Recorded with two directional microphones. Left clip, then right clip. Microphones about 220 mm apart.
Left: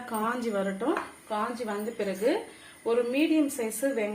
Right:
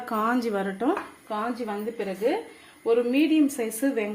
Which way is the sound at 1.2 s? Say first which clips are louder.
Right 2 dB; 30° right (ahead or behind).